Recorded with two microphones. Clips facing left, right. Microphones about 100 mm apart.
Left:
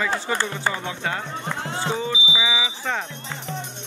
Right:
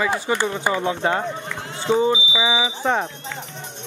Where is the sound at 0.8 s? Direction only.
30° right (ahead or behind).